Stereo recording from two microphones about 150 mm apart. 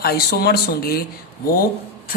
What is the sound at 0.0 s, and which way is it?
Speech, 90° left.